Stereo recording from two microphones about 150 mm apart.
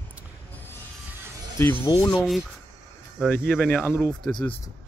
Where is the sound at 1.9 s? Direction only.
35° left (ahead or behind).